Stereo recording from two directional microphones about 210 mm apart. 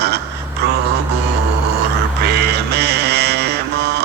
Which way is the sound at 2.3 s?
50° right (ahead or behind).